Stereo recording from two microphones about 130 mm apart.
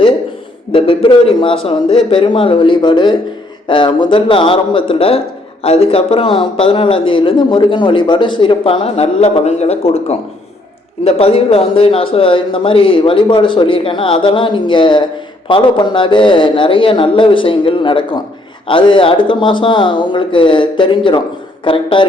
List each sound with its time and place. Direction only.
0.7 s a man's voice: 40° left (ahead or behind)